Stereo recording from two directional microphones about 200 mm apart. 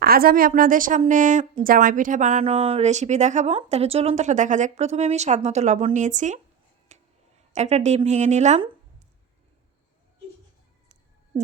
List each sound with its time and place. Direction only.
0.0 s a woman's voice: 50° right (ahead or behind)
6.9 s a sound: 35° right (ahead or behind)
7.5 s a woman's voice: 35° right (ahead or behind)